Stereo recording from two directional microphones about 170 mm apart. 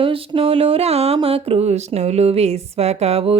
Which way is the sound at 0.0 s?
30° right (ahead or behind).